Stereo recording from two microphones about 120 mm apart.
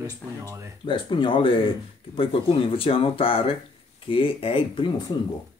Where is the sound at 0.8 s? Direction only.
45° left (ahead or behind).